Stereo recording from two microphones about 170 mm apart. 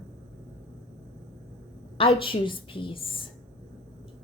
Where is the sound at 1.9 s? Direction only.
30° left (ahead or behind).